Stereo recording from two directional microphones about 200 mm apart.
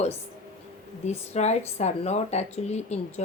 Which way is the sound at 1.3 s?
35° left (ahead or behind).